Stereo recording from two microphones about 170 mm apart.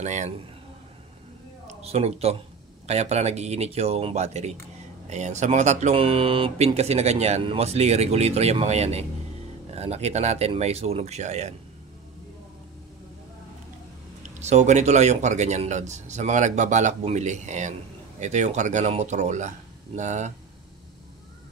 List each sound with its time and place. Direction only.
0.0 s speech: 45° right (ahead or behind)
1.8 s speech: 35° right (ahead or behind)
14.4 s speech: 40° right (ahead or behind)